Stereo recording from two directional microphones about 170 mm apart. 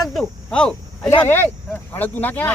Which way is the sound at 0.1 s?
5° left (ahead or behind).